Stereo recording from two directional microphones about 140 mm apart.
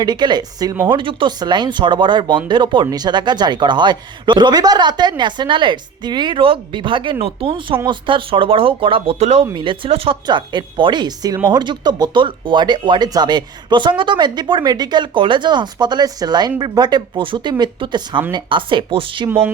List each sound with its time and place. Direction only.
0.0 s speech: 30° right (ahead or behind); by 9.5 s 50° right (ahead or behind)
9.5 s speech: 35° right (ahead or behind)